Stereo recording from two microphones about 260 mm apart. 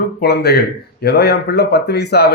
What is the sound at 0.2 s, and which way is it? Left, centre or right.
Speech, left.